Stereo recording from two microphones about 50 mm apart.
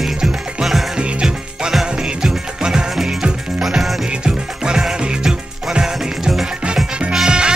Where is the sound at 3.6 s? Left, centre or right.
Centre.